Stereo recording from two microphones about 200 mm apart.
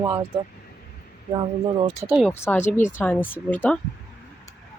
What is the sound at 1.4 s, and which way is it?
Speech, 25° right (ahead or behind).